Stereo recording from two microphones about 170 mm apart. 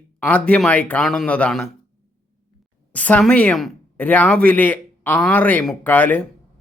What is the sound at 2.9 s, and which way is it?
Speech, 10° left (ahead or behind).